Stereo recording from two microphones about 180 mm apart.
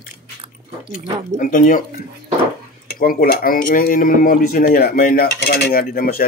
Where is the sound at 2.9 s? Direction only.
50° left (ahead or behind).